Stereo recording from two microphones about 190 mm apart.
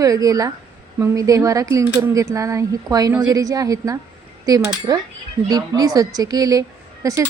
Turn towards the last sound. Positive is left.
turn(degrees=-15)  # may be behind; listen again after turning